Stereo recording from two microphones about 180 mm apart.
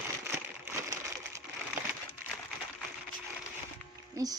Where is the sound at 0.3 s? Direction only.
15° right (ahead or behind).